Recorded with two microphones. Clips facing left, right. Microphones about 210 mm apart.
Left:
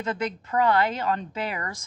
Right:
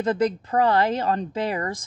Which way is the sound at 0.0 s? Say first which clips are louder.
Right 7 dB; 35° right (ahead or behind).